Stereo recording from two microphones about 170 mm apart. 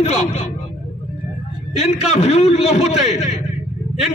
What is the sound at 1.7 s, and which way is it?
A man's voice, 40° left (ahead or behind).